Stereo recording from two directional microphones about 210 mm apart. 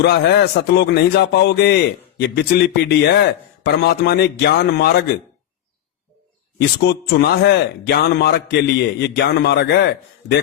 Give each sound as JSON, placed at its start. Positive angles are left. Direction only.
{"t": 0.0, "sound": "a man's voice", "side_deg": 50}
{"t": 6.6, "sound": "a man's voice", "side_deg": 50}